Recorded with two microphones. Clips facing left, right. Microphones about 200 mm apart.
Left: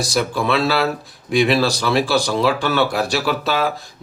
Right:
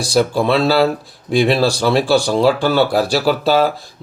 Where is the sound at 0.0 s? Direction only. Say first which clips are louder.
Right 5 dB; 30° right (ahead or behind).